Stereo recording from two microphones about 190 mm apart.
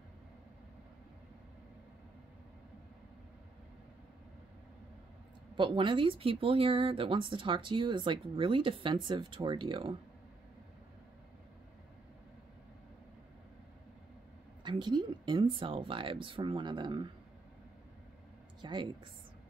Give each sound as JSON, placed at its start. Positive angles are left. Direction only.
{"t": 5.6, "sound": "speech", "side_deg": -25}
{"t": 14.6, "sound": "speech", "side_deg": -25}
{"t": 18.6, "sound": "speech", "side_deg": -25}